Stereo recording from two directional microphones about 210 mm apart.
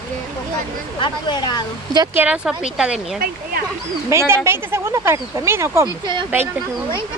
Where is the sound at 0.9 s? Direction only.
20° left (ahead or behind).